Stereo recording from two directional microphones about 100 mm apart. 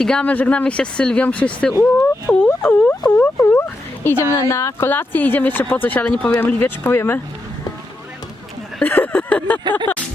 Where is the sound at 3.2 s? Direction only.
15° left (ahead or behind).